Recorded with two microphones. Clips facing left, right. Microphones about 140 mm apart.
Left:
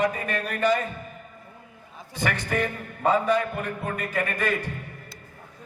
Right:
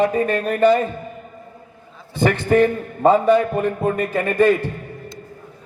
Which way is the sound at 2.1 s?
25° right (ahead or behind).